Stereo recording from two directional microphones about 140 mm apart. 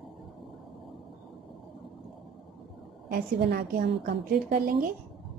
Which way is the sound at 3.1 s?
90° right.